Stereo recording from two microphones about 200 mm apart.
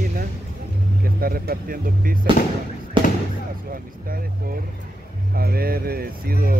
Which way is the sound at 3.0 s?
25° right (ahead or behind).